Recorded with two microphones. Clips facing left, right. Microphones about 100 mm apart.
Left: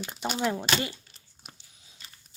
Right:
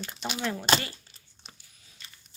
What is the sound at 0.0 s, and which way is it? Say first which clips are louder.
Speech: left 3 dB; 20° left (ahead or behind).